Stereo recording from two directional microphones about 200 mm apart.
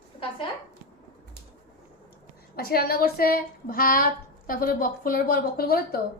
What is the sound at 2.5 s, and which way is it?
A woman's voice, 50° left (ahead or behind).